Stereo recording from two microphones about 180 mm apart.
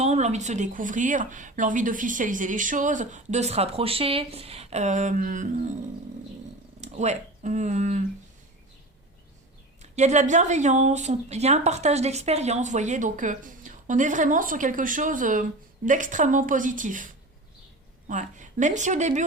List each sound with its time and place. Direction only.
0.0 s speech: 40° right (ahead or behind)
6.8 s speech: 40° right (ahead or behind)
9.8 s speech: 40° right (ahead or behind)
18.1 s speech: 45° right (ahead or behind)